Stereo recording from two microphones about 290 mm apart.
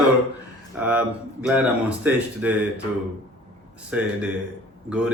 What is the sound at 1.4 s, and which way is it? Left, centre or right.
Speech, centre.